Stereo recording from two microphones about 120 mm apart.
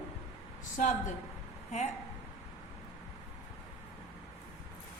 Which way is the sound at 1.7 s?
70° left (ahead or behind).